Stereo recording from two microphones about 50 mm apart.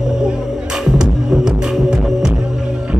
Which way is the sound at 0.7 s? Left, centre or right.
Centre.